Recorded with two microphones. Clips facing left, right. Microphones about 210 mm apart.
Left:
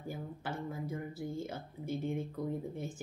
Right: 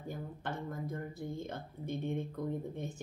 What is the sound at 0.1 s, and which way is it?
Speech, 5° left (ahead or behind).